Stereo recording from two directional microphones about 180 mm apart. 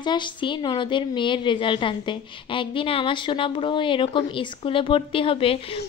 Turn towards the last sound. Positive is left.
turn(degrees=30)  # may be behind; listen again after turning